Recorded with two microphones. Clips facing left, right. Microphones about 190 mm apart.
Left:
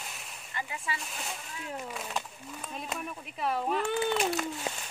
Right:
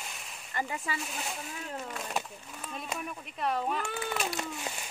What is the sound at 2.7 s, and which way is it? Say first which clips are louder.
Speech: even; centre (ahead or behind).